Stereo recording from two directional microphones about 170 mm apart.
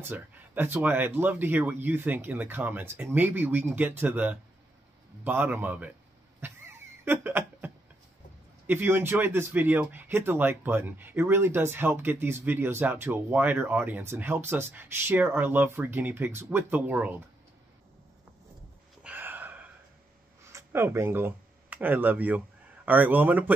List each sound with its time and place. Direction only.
0.0 s speech: 10° right (ahead or behind)
6.4 s cough: 10° right (ahead or behind)
7.1 s a sound: 10° right (ahead or behind)
8.6 s speech: 10° right (ahead or behind)
19.0 s a sound: 10° right (ahead or behind)
20.5 s speech: 15° right (ahead or behind)